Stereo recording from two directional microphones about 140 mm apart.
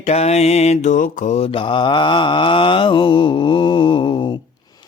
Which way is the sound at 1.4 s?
40° left (ahead or behind).